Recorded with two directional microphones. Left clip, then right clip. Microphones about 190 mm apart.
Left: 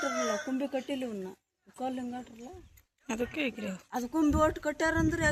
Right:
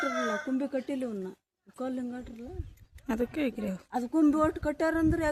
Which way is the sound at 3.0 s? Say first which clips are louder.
Right 2 dB; 30° right (ahead or behind).